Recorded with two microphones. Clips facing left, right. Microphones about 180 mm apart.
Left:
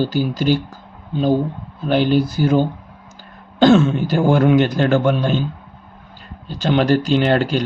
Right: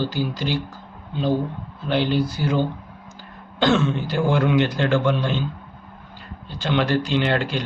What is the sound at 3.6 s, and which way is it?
A man's voice, 45° left (ahead or behind).